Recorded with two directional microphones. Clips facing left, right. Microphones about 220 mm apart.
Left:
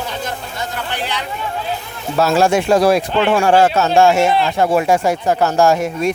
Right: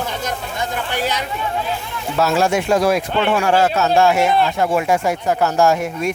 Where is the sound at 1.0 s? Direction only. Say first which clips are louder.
Right 5 dB; 40° right (ahead or behind).